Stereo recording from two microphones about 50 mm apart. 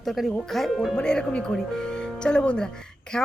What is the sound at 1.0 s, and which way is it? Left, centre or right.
Speech, centre.